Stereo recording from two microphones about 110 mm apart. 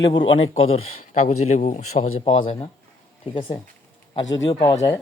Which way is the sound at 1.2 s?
90° left.